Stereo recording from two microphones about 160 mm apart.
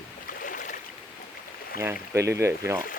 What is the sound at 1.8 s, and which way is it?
Speech, 15° right (ahead or behind).